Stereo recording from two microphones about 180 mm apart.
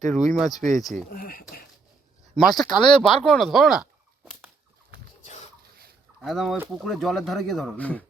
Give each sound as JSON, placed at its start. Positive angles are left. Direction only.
{"t": 0.1, "sound": "speech", "side_deg": 0}
{"t": 1.1, "sound": "speech", "side_deg": 55}
{"t": 2.3, "sound": "speech", "side_deg": 0}
{"t": 6.2, "sound": "speech", "side_deg": 0}